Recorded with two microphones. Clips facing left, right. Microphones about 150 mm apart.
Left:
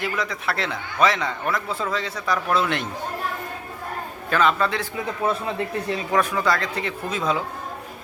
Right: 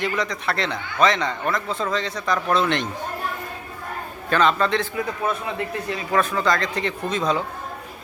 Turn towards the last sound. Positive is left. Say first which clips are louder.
# right 2 dB
turn(degrees=5)  # may be behind; listen again after turning